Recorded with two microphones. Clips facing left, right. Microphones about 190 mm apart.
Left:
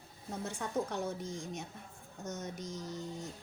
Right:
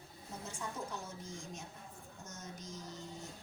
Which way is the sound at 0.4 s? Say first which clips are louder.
Left 8 dB; 65° left (ahead or behind).